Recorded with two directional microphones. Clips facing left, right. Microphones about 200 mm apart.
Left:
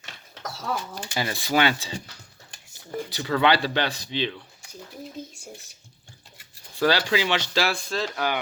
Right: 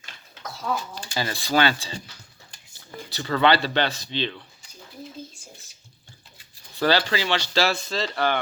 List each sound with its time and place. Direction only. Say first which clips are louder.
1.1 s speech: right 1 dB; 15° left (ahead or behind)
3.1 s speech: right 1 dB; 10° left (ahead or behind)
6.7 s speech: even; 10° left (ahead or behind)